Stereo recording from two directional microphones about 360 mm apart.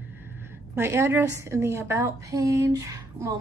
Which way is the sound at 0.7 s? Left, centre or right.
Centre.